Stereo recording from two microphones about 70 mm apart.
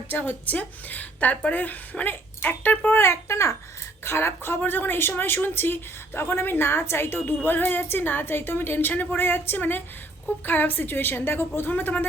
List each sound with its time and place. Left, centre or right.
0.1 s a woman's voice: left